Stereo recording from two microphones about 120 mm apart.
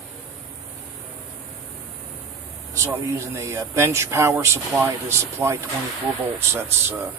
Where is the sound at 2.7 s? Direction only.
25° right (ahead or behind).